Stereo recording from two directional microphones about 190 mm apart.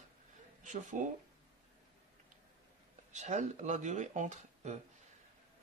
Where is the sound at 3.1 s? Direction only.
40° right (ahead or behind).